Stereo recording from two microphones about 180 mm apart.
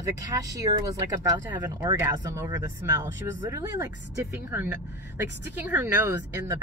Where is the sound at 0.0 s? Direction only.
20° right (ahead or behind).